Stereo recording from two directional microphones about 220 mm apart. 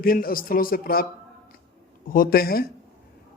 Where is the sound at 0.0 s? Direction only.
40° left (ahead or behind).